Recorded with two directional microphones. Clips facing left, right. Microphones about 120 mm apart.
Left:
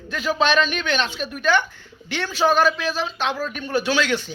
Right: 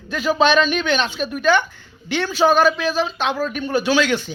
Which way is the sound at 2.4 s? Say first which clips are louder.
Right 3 dB; 25° right (ahead or behind).